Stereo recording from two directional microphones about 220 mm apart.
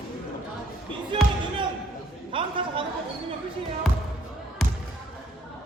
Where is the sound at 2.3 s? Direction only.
25° right (ahead or behind).